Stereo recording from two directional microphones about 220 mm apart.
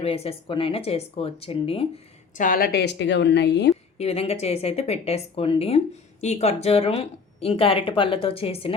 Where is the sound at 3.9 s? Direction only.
30° left (ahead or behind).